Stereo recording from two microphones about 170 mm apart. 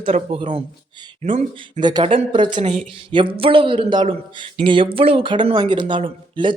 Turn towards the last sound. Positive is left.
turn(degrees=-30)  # may be behind; listen again after turning